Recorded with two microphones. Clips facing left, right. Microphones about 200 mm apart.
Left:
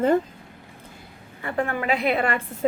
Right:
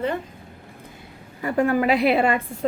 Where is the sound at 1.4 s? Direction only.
35° right (ahead or behind).